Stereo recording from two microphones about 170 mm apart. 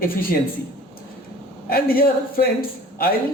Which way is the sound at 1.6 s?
60° left (ahead or behind).